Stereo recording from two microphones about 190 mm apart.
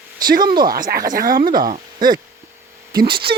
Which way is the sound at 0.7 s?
50° right (ahead or behind).